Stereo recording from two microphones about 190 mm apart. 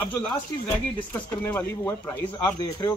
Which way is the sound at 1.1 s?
10° left (ahead or behind).